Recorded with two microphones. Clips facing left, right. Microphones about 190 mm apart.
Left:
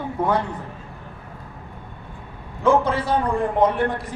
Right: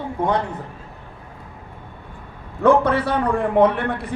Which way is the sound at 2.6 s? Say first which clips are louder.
Right 3 dB; 65° right (ahead or behind).